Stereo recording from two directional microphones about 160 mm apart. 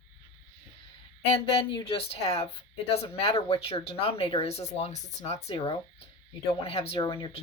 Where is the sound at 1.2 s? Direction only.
35° left (ahead or behind).